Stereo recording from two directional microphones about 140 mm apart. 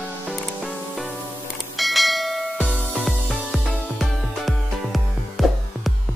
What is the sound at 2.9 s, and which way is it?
Music, centre (ahead or behind).